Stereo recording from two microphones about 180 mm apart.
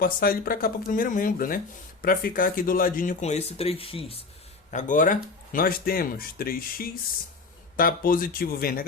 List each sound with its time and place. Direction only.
0.0 s speech: 55° left (ahead or behind); by 4.2 s 30° left (ahead or behind)
4.7 s speech: 45° left (ahead or behind)